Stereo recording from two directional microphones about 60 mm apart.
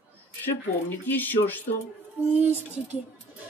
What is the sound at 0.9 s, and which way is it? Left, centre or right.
Speech, left.